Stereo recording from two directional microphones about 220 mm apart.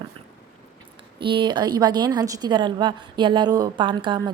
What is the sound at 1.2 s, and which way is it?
A woman's voice, 20° right (ahead or behind).